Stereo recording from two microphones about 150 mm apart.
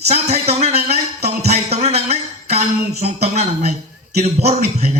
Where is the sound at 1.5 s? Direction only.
45° right (ahead or behind).